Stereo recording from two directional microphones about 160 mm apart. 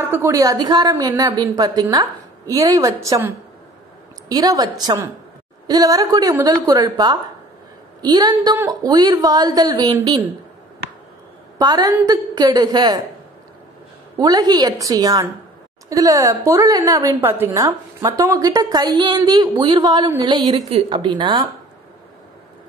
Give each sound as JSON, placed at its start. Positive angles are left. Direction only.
{"t": 0.1, "sound": "a woman's voice", "side_deg": -20}
{"t": 11.5, "sound": "a woman's voice", "side_deg": -25}
{"t": 14.1, "sound": "a woman's voice", "side_deg": -25}